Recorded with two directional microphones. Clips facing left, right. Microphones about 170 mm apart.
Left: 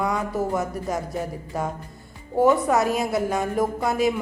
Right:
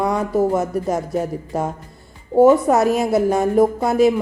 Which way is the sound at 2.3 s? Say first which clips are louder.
Right 7 dB; 25° right (ahead or behind).